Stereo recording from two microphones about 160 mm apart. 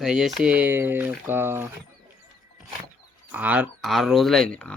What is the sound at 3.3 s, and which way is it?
Speech, 10° right (ahead or behind).